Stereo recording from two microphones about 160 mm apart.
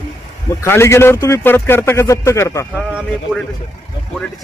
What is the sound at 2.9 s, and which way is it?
Speech, 5° right (ahead or behind).